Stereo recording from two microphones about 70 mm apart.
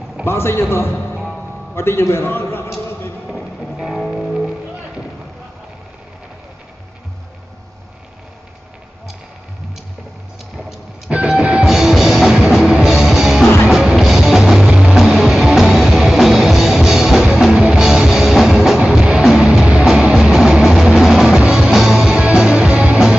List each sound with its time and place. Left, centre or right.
0.2 s a man's voice: left
1.1 s music: centre
1.8 s a man's voice: left
3.3 s music: centre
11.2 s music: centre
19.6 s music: centre
19.9 s music: centre